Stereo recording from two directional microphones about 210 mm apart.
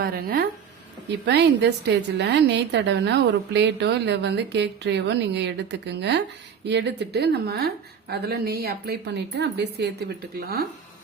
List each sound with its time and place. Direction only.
0.0 s a woman's voice: 45° right (ahead or behind)